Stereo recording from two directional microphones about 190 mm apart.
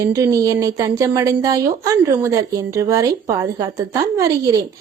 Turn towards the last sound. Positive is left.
turn(degrees=-15)  # may be behind; listen again after turning